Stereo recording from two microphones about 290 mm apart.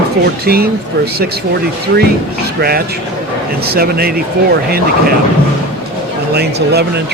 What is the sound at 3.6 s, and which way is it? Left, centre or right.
Speech, right.